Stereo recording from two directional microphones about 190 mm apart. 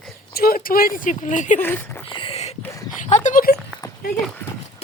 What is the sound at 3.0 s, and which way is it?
Speech, 40° left (ahead or behind).